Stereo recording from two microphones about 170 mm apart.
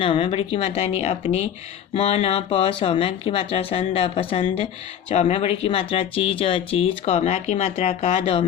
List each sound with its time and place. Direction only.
0.0 s speech: 30° left (ahead or behind)